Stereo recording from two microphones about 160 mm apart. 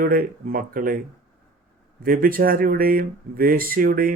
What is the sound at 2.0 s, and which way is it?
Speech, 60° right (ahead or behind).